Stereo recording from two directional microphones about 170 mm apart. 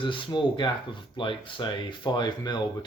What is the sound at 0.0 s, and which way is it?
Speech, 30° left (ahead or behind).